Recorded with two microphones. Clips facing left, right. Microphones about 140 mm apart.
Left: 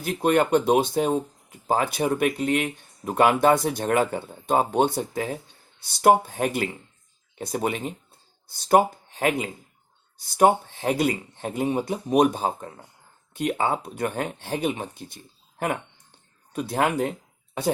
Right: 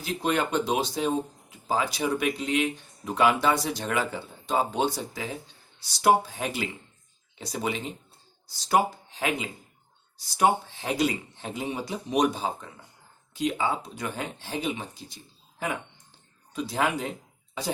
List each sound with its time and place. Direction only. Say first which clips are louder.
0.0 s speech: left 6 dB; 55° left (ahead or behind)